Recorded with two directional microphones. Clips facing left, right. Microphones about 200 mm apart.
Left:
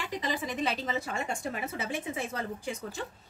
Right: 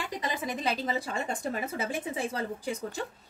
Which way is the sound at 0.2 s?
40° right (ahead or behind).